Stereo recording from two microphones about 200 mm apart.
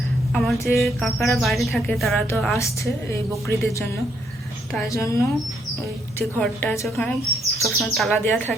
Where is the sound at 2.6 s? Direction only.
15° left (ahead or behind).